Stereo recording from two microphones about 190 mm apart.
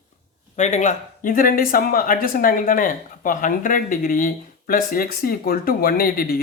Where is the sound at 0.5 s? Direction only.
35° left (ahead or behind).